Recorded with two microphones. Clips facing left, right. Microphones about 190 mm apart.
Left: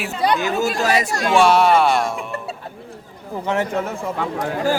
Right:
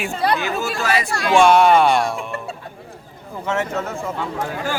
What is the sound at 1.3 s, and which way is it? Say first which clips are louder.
Speech: right 2 dB; centre (ahead or behind).